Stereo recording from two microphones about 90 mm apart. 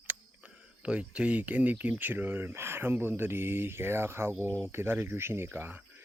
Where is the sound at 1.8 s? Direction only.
20° right (ahead or behind).